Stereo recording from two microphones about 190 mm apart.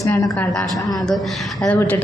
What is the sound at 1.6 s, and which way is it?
Speech, 10° left (ahead or behind).